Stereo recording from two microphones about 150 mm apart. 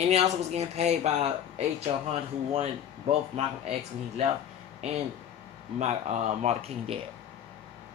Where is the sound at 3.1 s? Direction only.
45° right (ahead or behind).